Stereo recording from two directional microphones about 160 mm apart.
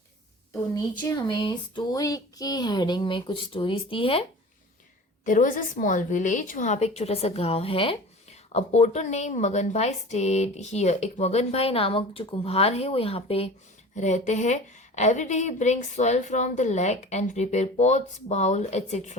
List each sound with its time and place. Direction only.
0.7 s a sound: 25° left (ahead or behind)
5.2 s a woman's voice: 55° left (ahead or behind); by 13.5 s 35° left (ahead or behind)
13.9 s a woman's voice: 50° left (ahead or behind)